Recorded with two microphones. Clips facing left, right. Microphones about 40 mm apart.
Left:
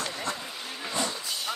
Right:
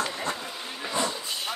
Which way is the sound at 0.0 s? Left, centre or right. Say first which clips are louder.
Right 3 dB; centre.